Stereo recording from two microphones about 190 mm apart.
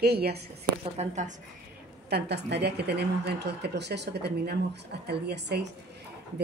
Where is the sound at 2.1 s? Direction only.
60° right (ahead or behind).